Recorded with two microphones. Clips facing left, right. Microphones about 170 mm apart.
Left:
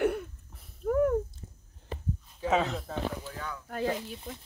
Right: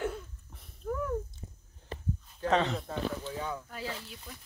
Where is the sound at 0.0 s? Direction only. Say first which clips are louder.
Left 7 dB; 70° left (ahead or behind).